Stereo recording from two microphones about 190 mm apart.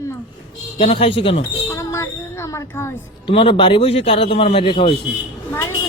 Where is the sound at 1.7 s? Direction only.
15° left (ahead or behind).